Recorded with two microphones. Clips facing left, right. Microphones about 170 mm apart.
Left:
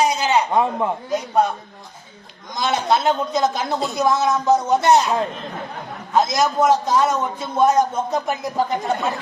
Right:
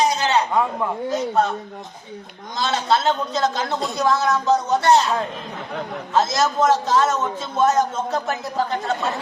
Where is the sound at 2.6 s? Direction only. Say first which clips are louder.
Left 1 dB; 15° left (ahead or behind).